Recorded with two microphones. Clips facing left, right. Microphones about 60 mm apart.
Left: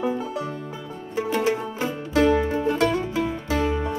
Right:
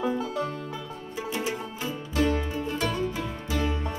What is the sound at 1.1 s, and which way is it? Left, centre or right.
Music, left.